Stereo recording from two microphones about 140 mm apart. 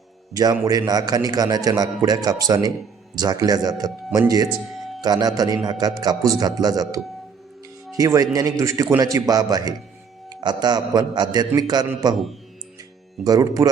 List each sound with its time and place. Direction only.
0.3 s a man's voice: 25° right (ahead or behind)
12.1 s speech: centre (ahead or behind)
13.2 s a man's voice: 25° right (ahead or behind)